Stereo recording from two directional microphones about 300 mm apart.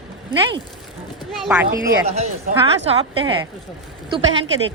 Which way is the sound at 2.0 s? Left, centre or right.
Right.